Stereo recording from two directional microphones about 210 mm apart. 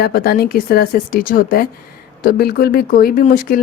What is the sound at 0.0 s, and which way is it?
Speech, 45° left (ahead or behind).